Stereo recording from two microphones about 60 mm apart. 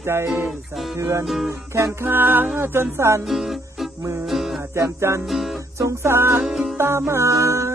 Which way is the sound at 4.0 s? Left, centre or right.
Right.